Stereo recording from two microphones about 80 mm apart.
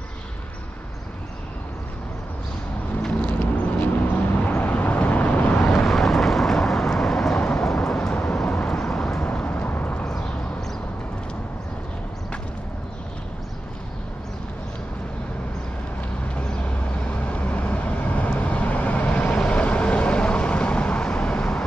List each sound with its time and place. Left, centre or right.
3.1 s vehicle: centre
5.6 s vehicle: centre; by 10.0 s left
17.0 s vehicle: centre